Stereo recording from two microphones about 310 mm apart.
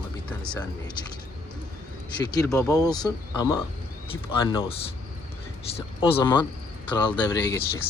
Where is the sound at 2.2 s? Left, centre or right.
Centre.